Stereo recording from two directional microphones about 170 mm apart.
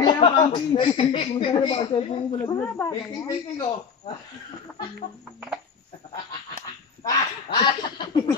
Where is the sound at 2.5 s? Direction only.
15° left (ahead or behind).